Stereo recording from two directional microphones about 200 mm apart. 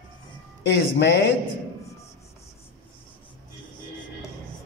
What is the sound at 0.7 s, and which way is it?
Speech, 60° left (ahead or behind).